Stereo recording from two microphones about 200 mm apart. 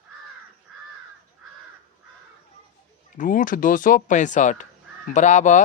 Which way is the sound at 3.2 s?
40° left (ahead or behind).